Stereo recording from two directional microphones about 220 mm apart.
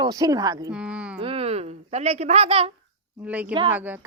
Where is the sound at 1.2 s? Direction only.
25° right (ahead or behind).